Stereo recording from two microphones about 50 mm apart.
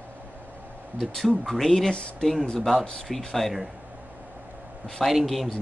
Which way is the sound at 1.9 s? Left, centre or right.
Centre.